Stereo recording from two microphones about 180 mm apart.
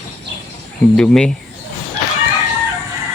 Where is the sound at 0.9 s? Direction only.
5° left (ahead or behind).